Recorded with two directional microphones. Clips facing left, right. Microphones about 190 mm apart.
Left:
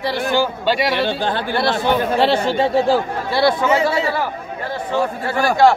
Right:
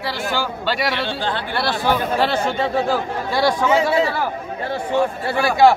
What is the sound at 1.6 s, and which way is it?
Speech, 20° left (ahead or behind).